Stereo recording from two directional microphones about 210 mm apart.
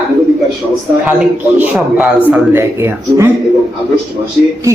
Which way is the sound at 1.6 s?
5° right (ahead or behind).